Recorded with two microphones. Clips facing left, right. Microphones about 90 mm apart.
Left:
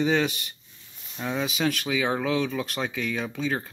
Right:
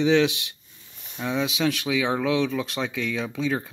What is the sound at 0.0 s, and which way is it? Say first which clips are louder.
Speech: right 4 dB; 5° left (ahead or behind).